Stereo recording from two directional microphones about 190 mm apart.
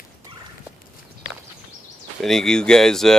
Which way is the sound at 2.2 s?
Centre (ahead or behind).